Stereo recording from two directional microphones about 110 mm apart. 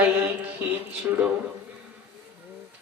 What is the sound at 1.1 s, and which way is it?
Speech, 25° right (ahead or behind).